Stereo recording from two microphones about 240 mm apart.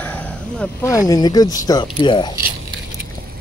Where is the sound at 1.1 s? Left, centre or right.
Centre.